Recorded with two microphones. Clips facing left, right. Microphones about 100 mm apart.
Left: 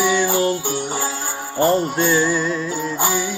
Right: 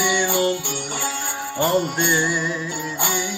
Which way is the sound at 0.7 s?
40° left (ahead or behind).